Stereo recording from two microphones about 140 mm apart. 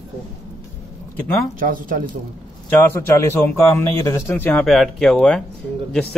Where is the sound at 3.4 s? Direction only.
20° left (ahead or behind).